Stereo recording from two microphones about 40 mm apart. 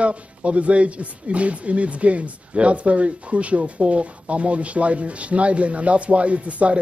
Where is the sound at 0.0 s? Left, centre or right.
Right.